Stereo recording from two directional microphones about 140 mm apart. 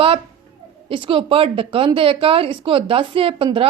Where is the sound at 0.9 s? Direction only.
40° right (ahead or behind).